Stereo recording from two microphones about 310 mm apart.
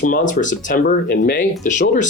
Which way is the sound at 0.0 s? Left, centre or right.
Left.